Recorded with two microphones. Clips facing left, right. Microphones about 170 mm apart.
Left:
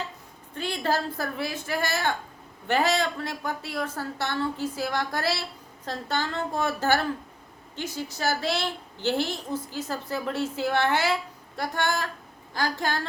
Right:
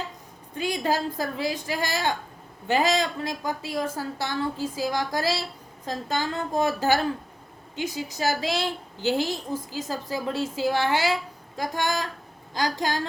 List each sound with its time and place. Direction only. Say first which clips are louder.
0.5 s a woman's voice: right 2 dB; 15° right (ahead or behind)